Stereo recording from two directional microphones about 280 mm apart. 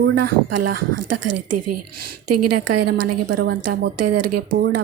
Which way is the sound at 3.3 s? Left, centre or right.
Right.